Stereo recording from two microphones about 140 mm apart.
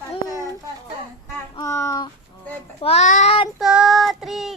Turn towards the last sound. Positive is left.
turn(degrees=0)  # may be behind; listen again after turning